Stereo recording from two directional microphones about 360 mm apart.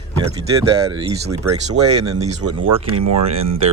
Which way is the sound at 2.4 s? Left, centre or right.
Right.